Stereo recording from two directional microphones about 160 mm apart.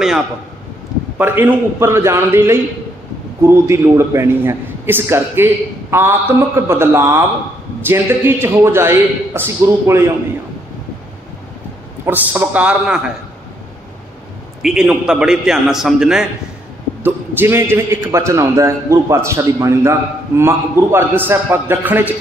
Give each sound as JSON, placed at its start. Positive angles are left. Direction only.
{"t": 1.1, "sound": "a man's voice", "side_deg": -10}
{"t": 12.1, "sound": "a man's voice", "side_deg": -10}
{"t": 14.6, "sound": "a man's voice", "side_deg": -5}